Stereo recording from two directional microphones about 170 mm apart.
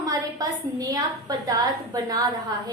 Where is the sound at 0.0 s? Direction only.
20° right (ahead or behind).